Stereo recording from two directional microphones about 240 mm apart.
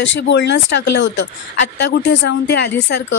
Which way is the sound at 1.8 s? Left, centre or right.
Left.